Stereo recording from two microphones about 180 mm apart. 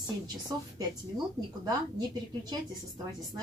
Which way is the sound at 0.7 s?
20° right (ahead or behind).